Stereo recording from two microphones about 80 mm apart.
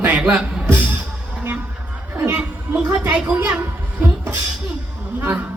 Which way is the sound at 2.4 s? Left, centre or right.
Centre.